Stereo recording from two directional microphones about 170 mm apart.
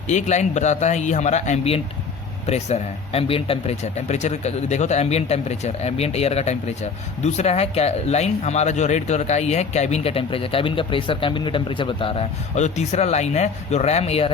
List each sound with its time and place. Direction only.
0.1 s a man's voice: 45° left (ahead or behind)